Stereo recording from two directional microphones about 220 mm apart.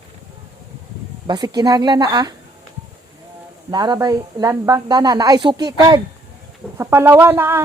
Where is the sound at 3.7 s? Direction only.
20° right (ahead or behind).